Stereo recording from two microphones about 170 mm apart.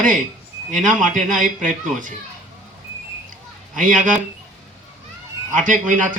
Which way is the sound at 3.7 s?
50° right (ahead or behind).